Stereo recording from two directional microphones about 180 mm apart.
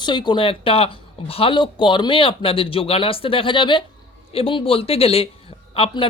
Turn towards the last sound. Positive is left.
turn(degrees=30)  # may be behind; listen again after turning